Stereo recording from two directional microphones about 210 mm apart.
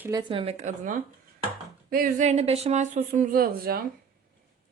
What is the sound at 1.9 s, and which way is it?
Speech, 40° right (ahead or behind).